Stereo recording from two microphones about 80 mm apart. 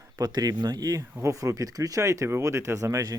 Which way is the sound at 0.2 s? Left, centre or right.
Right.